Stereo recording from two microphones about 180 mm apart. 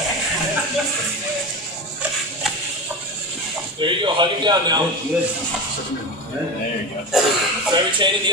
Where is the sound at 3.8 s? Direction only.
25° right (ahead or behind).